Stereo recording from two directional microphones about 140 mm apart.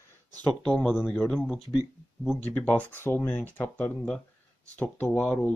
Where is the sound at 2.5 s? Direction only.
10° left (ahead or behind).